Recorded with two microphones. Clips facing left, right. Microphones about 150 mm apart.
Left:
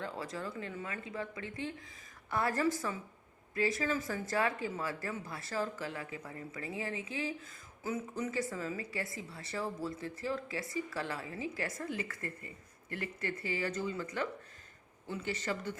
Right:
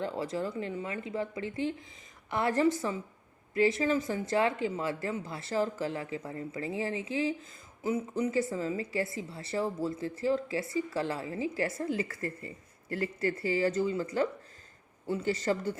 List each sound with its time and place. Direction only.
0.0 s speech: 30° right (ahead or behind)